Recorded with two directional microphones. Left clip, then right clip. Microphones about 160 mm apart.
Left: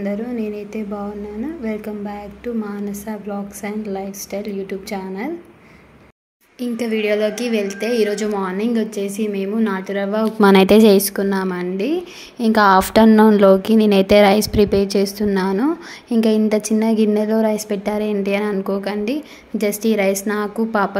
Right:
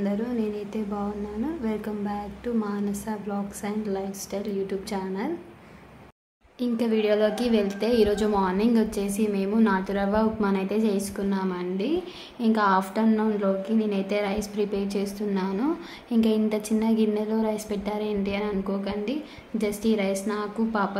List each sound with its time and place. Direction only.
0.0 s a woman's voice: 15° left (ahead or behind)
6.6 s a woman's voice: 10° left (ahead or behind)
10.4 s a woman's voice: 70° left (ahead or behind); by 21.0 s 45° left (ahead or behind)